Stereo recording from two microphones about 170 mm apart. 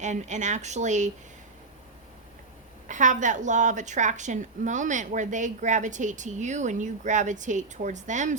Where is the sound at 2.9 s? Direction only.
45° right (ahead or behind).